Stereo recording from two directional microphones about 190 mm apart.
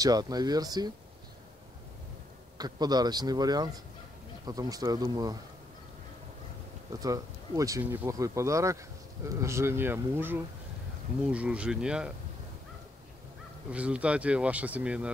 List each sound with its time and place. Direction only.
0.0 s speech: 20° right (ahead or behind)
2.5 s speech: 20° right (ahead or behind)
6.9 s speech: 20° right (ahead or behind)
13.7 s speech: 5° right (ahead or behind)